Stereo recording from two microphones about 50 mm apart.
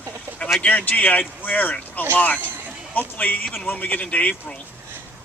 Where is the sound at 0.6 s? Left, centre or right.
Left.